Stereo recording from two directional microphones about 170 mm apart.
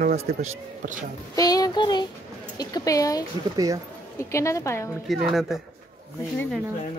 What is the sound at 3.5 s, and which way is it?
Speech, 20° right (ahead or behind).